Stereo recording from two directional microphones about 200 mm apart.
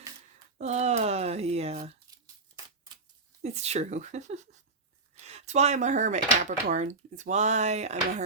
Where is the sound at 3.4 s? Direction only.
35° right (ahead or behind).